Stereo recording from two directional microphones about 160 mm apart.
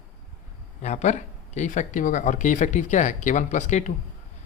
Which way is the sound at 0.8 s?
45° left (ahead or behind).